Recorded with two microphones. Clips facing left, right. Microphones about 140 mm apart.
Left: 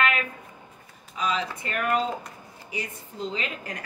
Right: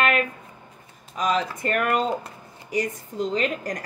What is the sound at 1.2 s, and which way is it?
A woman's voice, 45° right (ahead or behind).